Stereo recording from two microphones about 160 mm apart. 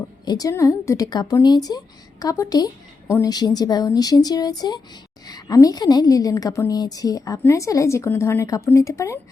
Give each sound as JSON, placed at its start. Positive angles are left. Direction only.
{"t": 0.3, "sound": "a woman's voice", "side_deg": 20}